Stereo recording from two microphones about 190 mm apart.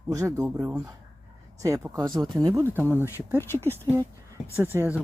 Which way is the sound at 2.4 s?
15° right (ahead or behind).